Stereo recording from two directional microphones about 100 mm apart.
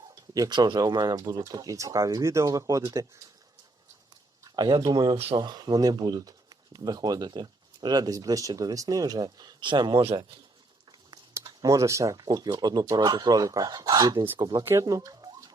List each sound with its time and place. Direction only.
0.3 s speech: 40° right (ahead or behind)
4.4 s speech: 45° right (ahead or behind)
5.1 s speech: 80° right
5.4 s speech: 40° right (ahead or behind)
11.4 s speech: 35° right (ahead or behind)
12.1 s speech: 45° right (ahead or behind)
14.6 s speech: 25° right (ahead or behind)
14.8 s a sound: 40° right (ahead or behind)